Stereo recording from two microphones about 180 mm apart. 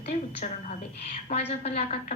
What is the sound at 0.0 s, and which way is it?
A woman's voice, 40° left (ahead or behind).